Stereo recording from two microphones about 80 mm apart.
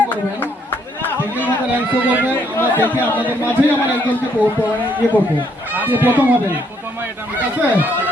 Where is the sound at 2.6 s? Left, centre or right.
Left.